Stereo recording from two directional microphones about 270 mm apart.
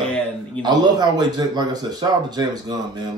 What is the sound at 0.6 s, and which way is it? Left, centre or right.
Speech, centre.